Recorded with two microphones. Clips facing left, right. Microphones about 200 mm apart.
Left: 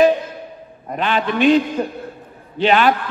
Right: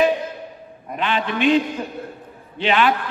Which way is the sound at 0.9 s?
40° left (ahead or behind).